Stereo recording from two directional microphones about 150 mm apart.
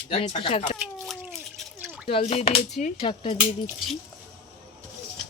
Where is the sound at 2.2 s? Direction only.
50° left (ahead or behind).